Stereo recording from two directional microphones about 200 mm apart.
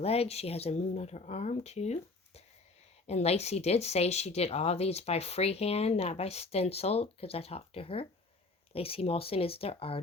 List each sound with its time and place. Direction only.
0.0 s speech: 30° left (ahead or behind)